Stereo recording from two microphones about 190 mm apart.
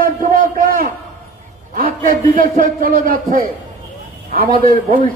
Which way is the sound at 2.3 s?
50° right (ahead or behind).